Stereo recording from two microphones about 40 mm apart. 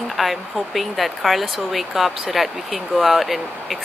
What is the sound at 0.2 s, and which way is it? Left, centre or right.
Speech, centre.